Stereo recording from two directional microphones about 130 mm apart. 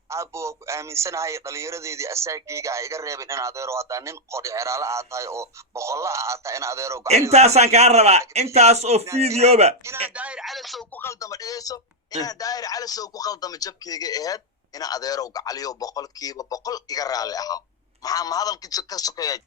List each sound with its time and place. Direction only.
0.1 s a man's voice: 20° right (ahead or behind)
7.3 s a man's voice: 55° right (ahead or behind)
10.2 s speech: 10° right (ahead or behind)
10.9 s speech: 20° left (ahead or behind)